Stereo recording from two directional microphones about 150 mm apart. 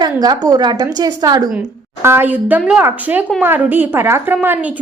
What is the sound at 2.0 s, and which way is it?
A woman's voice, 15° right (ahead or behind).